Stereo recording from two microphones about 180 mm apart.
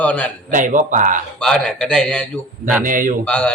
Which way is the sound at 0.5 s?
45° right (ahead or behind).